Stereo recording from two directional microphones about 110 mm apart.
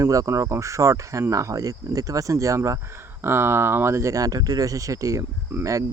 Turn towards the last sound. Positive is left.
turn(degrees=-30)  # may be behind; listen again after turning